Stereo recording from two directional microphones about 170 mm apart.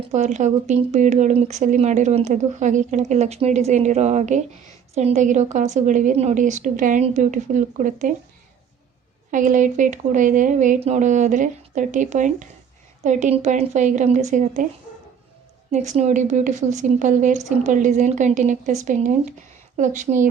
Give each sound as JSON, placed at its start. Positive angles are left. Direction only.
{"t": 0.1, "sound": "speech", "side_deg": -45}
{"t": 9.3, "sound": "speech", "side_deg": -50}
{"t": 15.7, "sound": "speech", "side_deg": -45}